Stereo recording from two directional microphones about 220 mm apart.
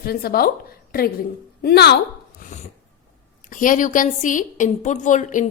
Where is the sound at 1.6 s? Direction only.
50° left (ahead or behind).